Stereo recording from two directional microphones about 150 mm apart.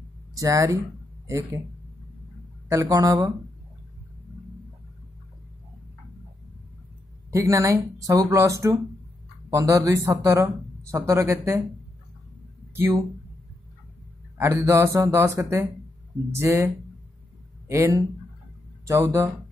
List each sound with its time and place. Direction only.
0.3 s speech: 20° right (ahead or behind)
2.7 s speech: 25° right (ahead or behind)
7.2 s speech: 20° right (ahead or behind)
12.7 s speech: 15° right (ahead or behind)
14.4 s a man's voice: 20° right (ahead or behind)